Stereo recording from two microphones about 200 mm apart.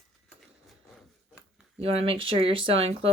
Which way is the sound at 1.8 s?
30° right (ahead or behind).